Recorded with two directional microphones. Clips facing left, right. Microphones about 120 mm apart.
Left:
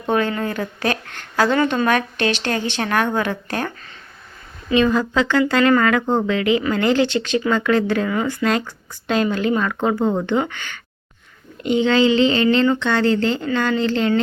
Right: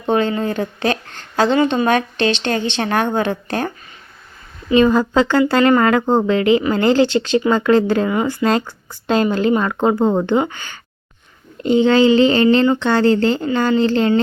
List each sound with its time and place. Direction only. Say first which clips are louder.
0.1 s a woman's voice: right 3 dB; 25° right (ahead or behind)
4.7 s speech: right 4 dB; 35° right (ahead or behind)